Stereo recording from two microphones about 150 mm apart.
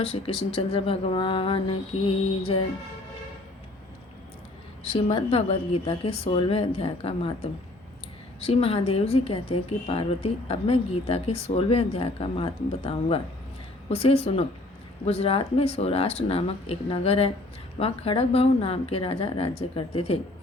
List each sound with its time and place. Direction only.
0.0 s a woman's voice: 40° left (ahead or behind)
4.8 s a woman's voice: 40° left (ahead or behind)